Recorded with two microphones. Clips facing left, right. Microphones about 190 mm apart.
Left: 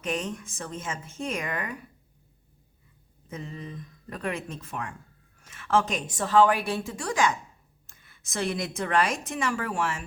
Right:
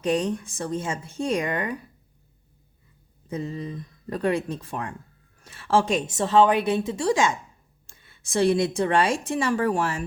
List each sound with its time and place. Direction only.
0.0 s a woman's voice: 35° right (ahead or behind)
3.2 s a woman's voice: 35° right (ahead or behind)